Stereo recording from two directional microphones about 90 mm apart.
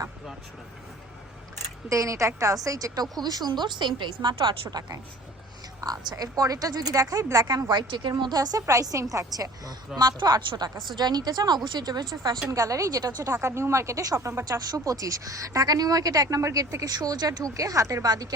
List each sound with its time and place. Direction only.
1.9 s a woman's voice: 35° right (ahead or behind); by 4.7 s 70° right (ahead or behind)
4.7 s a woman's voice: 50° right (ahead or behind)